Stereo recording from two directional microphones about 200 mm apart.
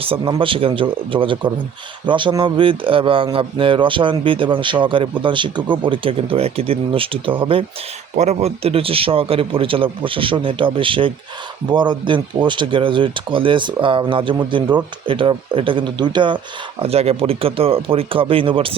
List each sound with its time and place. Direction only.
0.0 s speech: 25° right (ahead or behind)